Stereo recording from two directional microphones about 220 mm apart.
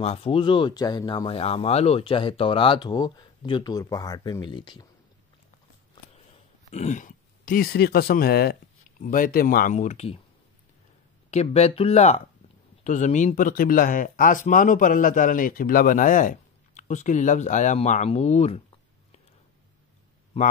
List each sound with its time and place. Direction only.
0.0 s speech: 25° left (ahead or behind)
6.7 s speech: 30° left (ahead or behind)
11.2 s speech: 30° left (ahead or behind)